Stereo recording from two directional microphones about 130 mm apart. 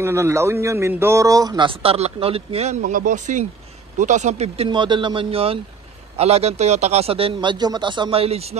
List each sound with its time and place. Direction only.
0.0 s a man's voice: 20° right (ahead or behind)
1.7 s speech: 45° right (ahead or behind)
4.6 s speech: 40° right (ahead or behind)